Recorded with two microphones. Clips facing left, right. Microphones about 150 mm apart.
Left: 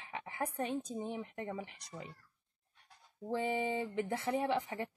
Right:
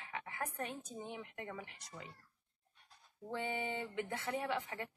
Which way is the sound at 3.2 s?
30° left (ahead or behind).